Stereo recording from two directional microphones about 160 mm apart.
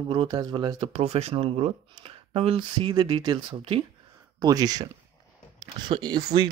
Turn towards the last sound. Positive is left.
turn(degrees=-25)  # may be behind; listen again after turning